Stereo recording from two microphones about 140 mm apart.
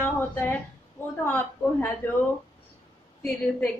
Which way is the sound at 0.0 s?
15° left (ahead or behind).